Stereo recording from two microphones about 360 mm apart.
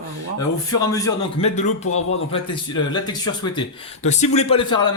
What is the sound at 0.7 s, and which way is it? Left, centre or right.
Speech, centre.